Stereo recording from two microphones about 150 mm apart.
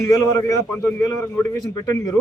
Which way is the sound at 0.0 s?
20° left (ahead or behind).